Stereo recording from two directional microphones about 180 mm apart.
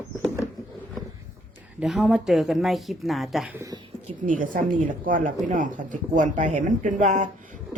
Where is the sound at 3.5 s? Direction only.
20° right (ahead or behind).